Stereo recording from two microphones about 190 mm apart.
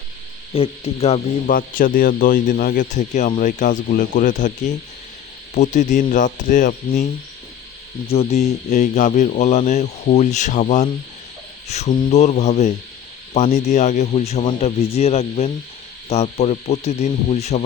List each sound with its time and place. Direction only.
0.5 s speech: 30° left (ahead or behind)
1.5 s speech: 45° left (ahead or behind)